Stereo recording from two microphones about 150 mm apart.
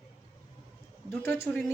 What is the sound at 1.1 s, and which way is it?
Speech, 15° left (ahead or behind).